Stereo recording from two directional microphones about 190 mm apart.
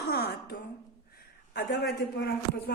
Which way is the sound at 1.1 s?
55° left (ahead or behind).